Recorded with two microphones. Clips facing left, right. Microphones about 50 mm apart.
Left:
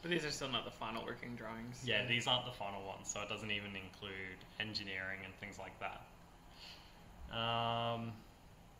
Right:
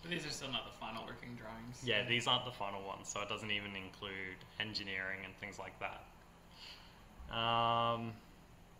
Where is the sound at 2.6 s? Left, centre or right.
Centre.